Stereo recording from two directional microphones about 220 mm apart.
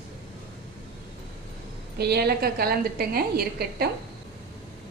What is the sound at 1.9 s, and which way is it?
A woman's voice, 45° right (ahead or behind).